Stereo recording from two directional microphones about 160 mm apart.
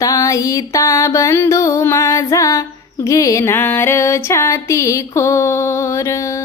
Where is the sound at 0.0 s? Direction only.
20° left (ahead or behind).